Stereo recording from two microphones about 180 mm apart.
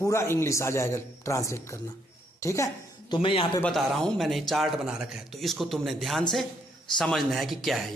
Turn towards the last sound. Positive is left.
turn(degrees=0)  # may be behind; listen again after turning